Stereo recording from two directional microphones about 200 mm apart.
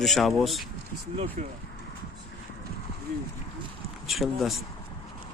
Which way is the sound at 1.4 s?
35° right (ahead or behind).